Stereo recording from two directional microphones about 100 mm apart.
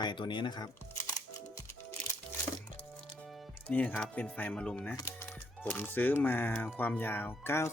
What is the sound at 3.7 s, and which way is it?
Speech, 15° left (ahead or behind).